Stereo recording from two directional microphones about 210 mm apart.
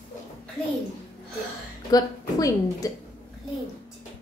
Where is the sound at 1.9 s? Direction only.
15° left (ahead or behind).